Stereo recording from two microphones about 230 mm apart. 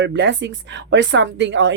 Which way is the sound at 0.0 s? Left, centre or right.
Right.